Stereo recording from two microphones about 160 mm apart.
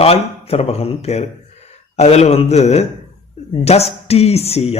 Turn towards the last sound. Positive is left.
turn(degrees=40)  # may be behind; listen again after turning